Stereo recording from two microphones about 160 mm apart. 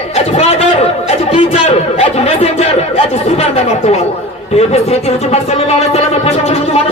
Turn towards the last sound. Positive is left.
turn(degrees=40)  # may be behind; listen again after turning